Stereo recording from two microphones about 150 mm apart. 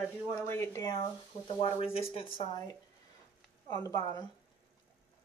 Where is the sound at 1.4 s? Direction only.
40° left (ahead or behind).